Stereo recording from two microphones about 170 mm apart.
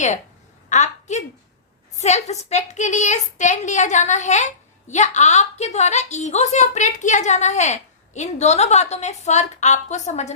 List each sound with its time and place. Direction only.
0.7 s a woman's voice: 45° left (ahead or behind)